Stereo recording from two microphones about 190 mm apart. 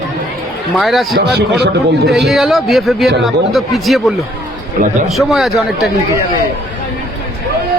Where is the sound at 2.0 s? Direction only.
Centre (ahead or behind).